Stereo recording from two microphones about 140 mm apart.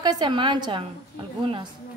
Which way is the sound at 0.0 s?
30° right (ahead or behind).